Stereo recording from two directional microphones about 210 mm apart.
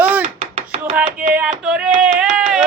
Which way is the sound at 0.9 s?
5° right (ahead or behind).